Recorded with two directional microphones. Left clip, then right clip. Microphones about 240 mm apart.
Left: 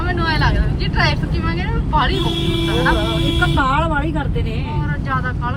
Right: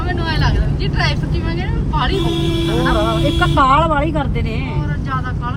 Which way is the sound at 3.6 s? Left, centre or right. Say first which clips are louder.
Right 5 dB; right.